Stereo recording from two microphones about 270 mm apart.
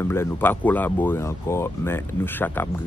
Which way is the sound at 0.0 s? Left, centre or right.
Centre.